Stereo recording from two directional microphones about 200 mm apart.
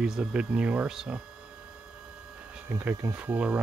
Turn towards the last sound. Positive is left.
turn(degrees=-5)  # may be behind; listen again after turning